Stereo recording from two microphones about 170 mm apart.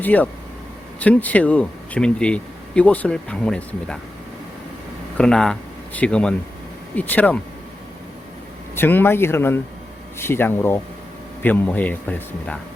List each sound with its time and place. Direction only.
0.0 s speech: 10° left (ahead or behind)
5.1 s speech: 5° left (ahead or behind)
8.7 s speech: 10° left (ahead or behind)